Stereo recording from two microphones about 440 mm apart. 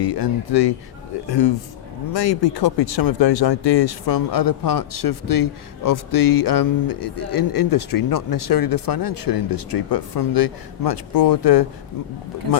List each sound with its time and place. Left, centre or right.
0.0 s speech: left